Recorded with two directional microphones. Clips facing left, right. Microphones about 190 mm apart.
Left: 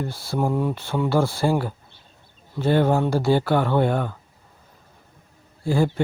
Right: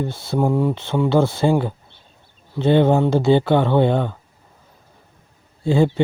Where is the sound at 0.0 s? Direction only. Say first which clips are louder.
Right 4 dB; 20° right (ahead or behind).